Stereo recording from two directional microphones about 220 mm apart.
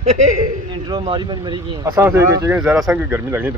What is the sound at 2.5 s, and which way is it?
Speech, 5° right (ahead or behind).